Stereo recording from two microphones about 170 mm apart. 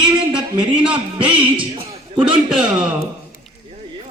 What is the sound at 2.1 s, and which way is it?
Speech, 30° right (ahead or behind).